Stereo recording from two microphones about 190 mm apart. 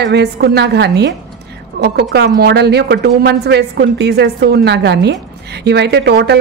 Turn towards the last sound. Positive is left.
turn(degrees=-60)  # may be behind; listen again after turning